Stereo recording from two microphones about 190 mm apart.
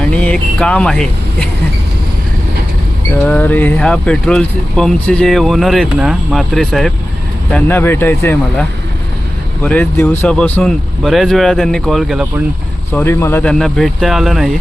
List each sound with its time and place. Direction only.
0.1 s speech: 5° left (ahead or behind)
3.2 s speech: 10° left (ahead or behind)
9.6 s speech: 5° left (ahead or behind)
12.9 s speech: 15° left (ahead or behind)